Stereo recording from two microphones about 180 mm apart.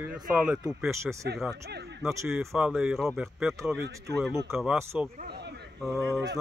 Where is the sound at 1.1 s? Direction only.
5° right (ahead or behind).